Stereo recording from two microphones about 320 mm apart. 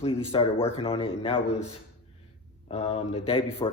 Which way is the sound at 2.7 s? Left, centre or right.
Centre.